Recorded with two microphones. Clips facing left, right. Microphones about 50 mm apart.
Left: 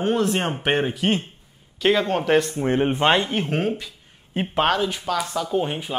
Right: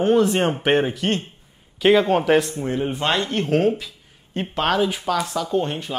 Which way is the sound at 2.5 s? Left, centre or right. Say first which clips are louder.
Left 3 dB; left.